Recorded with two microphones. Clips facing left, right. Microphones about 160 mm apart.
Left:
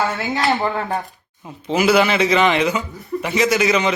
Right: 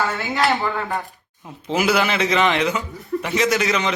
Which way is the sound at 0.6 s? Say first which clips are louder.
Left 3 dB; 20° left (ahead or behind).